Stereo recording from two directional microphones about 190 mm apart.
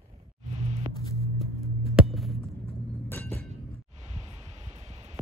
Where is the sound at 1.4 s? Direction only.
Centre (ahead or behind).